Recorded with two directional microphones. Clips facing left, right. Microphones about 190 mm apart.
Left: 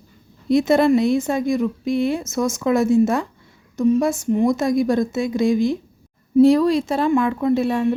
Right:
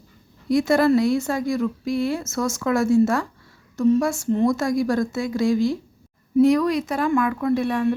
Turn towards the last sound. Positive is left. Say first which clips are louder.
# left 2 dB
turn(degrees=25)  # may be behind; listen again after turning